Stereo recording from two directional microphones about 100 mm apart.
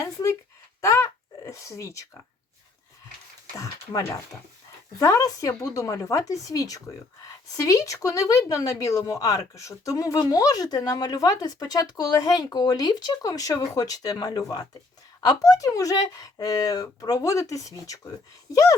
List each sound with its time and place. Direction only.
0.0 s speech: 35° left (ahead or behind)
0.8 s a sound: 30° left (ahead or behind)
3.5 s speech: 30° left (ahead or behind)